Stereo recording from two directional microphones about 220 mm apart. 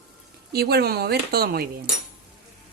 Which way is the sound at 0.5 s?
45° right (ahead or behind).